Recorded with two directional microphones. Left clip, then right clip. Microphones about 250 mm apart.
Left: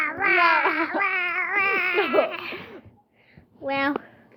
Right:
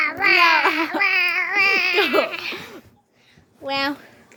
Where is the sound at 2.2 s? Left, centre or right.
Centre.